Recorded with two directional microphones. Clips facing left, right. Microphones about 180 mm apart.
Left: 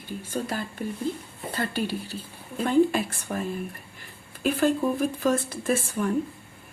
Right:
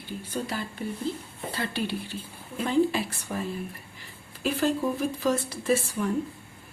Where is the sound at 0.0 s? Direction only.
45° left (ahead or behind).